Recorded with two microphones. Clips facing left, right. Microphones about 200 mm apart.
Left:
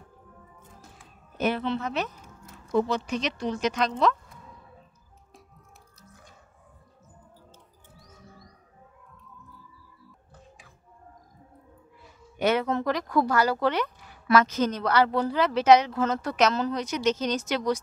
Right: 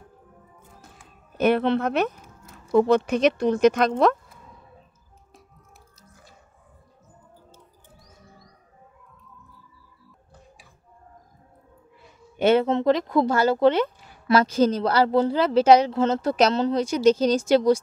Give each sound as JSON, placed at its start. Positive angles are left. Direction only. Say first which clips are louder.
{"t": 1.4, "sound": "speech", "louder": "right 7 dB", "side_deg": -60}
{"t": 12.4, "sound": "speech", "louder": "right 6 dB", "side_deg": -30}